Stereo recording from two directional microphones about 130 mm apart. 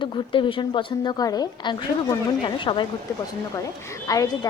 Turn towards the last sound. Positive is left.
turn(degrees=30)  # may be behind; listen again after turning